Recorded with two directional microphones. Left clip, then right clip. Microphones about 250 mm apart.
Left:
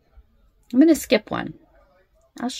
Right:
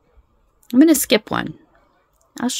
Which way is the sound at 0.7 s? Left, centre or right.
Right.